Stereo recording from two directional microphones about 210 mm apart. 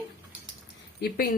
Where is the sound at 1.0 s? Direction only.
45° left (ahead or behind).